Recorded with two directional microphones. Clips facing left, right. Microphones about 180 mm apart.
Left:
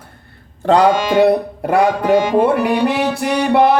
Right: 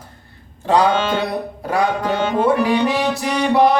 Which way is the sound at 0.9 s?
10° left (ahead or behind).